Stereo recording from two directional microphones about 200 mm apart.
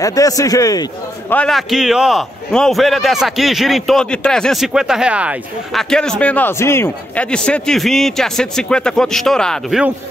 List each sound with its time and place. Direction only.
0.0 s a man's voice: 15° left (ahead or behind)
1.3 s a man's voice: 5° left (ahead or behind)